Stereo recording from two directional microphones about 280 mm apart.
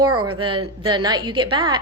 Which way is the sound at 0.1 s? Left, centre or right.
Right.